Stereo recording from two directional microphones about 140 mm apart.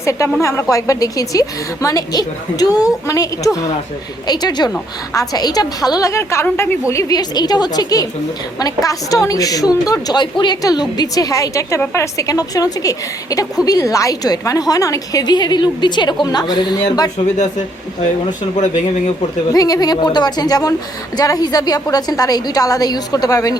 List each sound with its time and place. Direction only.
0.0 s a woman's voice: 20° left (ahead or behind)
19.5 s a woman's voice: 25° left (ahead or behind)